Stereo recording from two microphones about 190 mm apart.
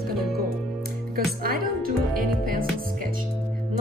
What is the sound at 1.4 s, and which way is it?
Music, 50° right (ahead or behind).